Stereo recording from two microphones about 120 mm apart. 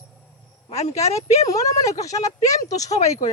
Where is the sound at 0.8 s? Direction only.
65° left (ahead or behind).